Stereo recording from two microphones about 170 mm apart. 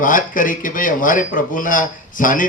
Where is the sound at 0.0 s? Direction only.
50° left (ahead or behind).